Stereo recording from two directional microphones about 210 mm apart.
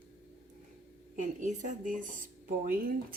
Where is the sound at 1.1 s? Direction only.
35° right (ahead or behind).